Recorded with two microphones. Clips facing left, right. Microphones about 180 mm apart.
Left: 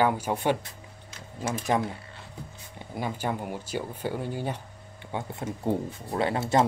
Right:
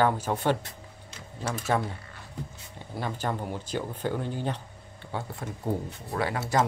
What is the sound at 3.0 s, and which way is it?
Speech, 10° left (ahead or behind).